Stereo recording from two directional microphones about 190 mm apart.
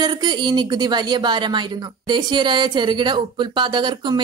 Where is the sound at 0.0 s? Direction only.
20° right (ahead or behind).